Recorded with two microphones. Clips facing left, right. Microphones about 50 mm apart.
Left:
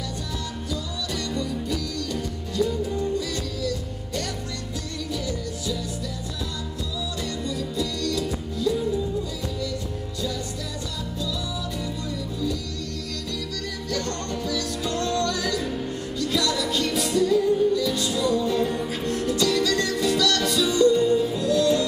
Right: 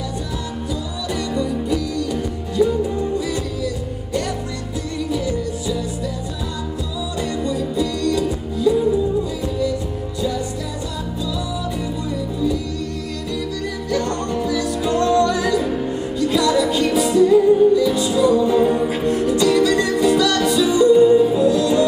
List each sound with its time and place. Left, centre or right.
1.3 s music: centre
7.4 s music: centre
13.8 s music: centre